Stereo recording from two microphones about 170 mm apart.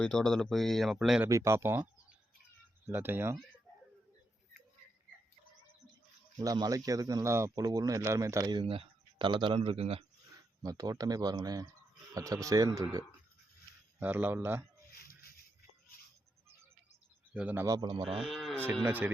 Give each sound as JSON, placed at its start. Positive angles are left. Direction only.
{"t": 0.0, "sound": "speech", "side_deg": 5}
{"t": 1.3, "sound": "speech", "side_deg": -15}
{"t": 6.4, "sound": "speech", "side_deg": -20}
{"t": 10.6, "sound": "speech", "side_deg": -20}
{"t": 14.0, "sound": "speech", "side_deg": -10}
{"t": 14.9, "sound": "a sound", "side_deg": 60}
{"t": 17.3, "sound": "speech", "side_deg": -10}
{"t": 17.7, "sound": "speech", "side_deg": -25}
{"t": 18.2, "sound": "speech", "side_deg": 0}
{"t": 18.9, "sound": "speech", "side_deg": -10}